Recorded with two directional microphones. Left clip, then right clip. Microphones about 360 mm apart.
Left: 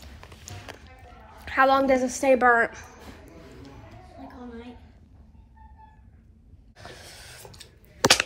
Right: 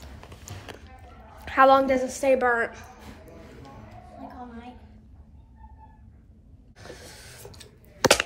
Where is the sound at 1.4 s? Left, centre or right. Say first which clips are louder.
Right 3 dB; centre.